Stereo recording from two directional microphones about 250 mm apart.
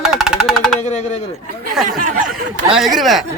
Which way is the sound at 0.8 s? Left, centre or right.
Left.